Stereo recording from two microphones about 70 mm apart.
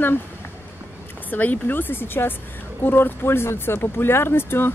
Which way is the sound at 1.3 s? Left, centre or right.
Left.